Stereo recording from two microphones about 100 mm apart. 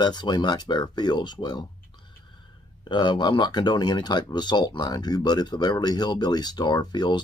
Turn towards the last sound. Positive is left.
turn(degrees=45)  # may be behind; listen again after turning